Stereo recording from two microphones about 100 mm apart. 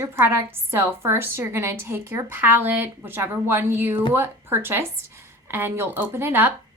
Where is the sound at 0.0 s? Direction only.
25° right (ahead or behind).